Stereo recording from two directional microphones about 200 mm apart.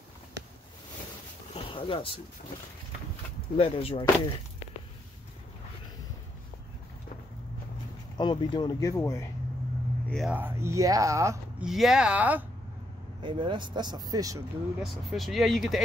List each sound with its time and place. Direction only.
1.5 s a sound: 25° left (ahead or behind)
3.5 s speech: 30° left (ahead or behind)
8.2 s speech: 25° left (ahead or behind)
10.0 s speech: centre (ahead or behind)
10.3 s speech: 10° right (ahead or behind)
11.6 s speech: centre (ahead or behind)
13.2 s speech: 25° right (ahead or behind)
14.8 s speech: centre (ahead or behind)